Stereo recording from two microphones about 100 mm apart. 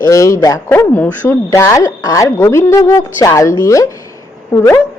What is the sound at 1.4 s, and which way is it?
A woman's voice, 30° left (ahead or behind).